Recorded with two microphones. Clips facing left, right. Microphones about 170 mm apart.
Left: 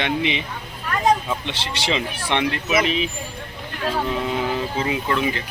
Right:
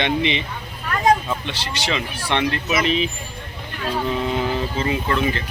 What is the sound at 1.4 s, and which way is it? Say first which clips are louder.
Speech: even; 25° left (ahead or behind).